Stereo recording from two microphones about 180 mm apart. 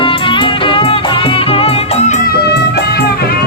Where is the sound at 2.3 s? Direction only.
60° left (ahead or behind).